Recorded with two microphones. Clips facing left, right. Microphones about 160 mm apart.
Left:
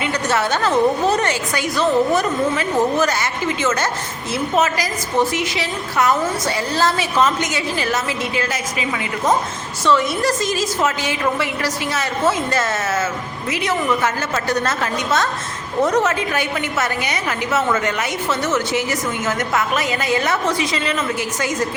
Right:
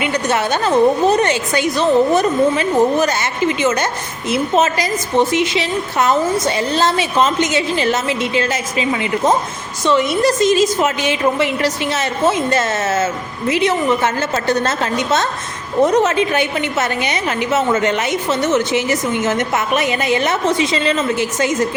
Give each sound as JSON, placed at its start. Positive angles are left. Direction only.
{"t": 0.0, "sound": "a woman's voice", "side_deg": -20}